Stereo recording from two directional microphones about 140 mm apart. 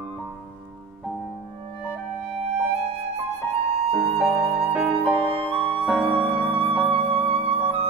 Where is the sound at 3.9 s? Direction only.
Centre (ahead or behind).